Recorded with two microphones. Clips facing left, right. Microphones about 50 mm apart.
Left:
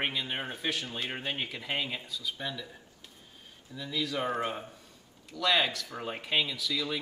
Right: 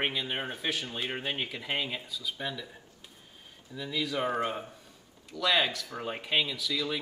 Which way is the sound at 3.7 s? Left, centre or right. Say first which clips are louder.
Right 1 dB; centre.